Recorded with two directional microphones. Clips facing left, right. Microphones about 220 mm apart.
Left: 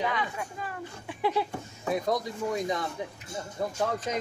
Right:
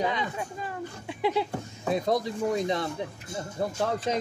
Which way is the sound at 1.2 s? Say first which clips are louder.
Right 1 dB; 15° right (ahead or behind).